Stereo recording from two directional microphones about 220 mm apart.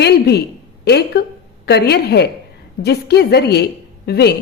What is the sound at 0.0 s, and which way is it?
A woman's voice, 50° left (ahead or behind).